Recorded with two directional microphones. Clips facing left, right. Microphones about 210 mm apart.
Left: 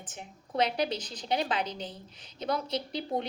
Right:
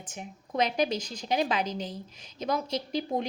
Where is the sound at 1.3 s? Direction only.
30° left (ahead or behind).